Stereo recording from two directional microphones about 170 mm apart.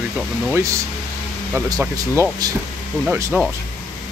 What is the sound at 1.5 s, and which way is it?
Speech, 15° right (ahead or behind).